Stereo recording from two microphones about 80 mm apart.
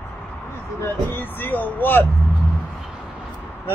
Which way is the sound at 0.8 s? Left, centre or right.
Left.